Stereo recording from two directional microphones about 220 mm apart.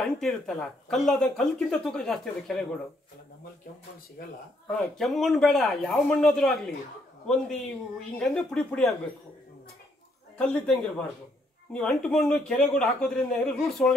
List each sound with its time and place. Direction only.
0.0 s speech: centre (ahead or behind)
4.2 s speech: 45° left (ahead or behind)
4.6 s speech: centre (ahead or behind)
10.3 s speech: 5° left (ahead or behind)